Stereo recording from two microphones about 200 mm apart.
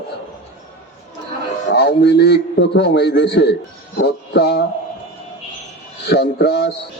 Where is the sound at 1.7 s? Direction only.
55° left (ahead or behind).